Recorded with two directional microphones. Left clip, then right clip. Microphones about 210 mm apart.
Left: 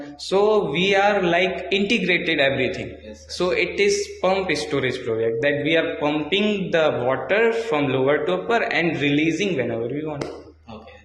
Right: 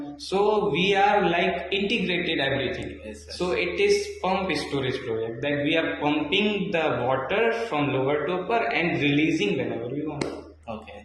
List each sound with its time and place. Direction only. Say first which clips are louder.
0.3 s a man's voice: left 4 dB; 45° left (ahead or behind)